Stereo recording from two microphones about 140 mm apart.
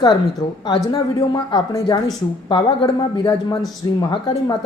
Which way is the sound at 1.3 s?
30° left (ahead or behind).